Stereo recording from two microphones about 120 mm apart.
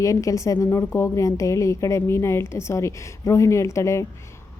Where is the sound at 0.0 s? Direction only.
25° left (ahead or behind).